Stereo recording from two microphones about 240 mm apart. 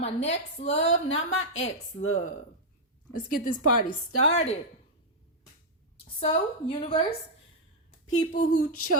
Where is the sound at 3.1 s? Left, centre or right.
Left.